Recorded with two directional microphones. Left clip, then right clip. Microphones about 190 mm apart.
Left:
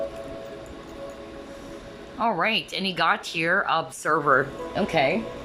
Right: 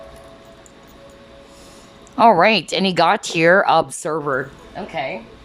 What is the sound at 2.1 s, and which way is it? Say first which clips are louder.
Speech: right 11 dB; 30° right (ahead or behind).